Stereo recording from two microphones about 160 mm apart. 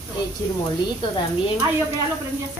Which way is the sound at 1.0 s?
30° left (ahead or behind).